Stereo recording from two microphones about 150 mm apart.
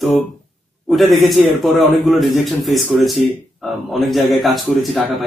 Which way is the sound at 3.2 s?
10° right (ahead or behind).